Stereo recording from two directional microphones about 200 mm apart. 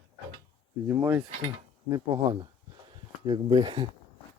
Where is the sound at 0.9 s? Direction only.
15° right (ahead or behind).